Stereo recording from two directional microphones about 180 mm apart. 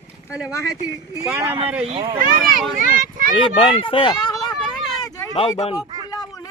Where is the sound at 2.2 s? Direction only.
50° right (ahead or behind).